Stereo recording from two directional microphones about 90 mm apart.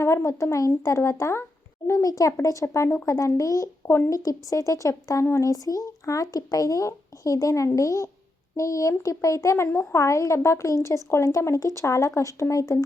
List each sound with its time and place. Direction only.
0.0 s speech: 30° left (ahead or behind)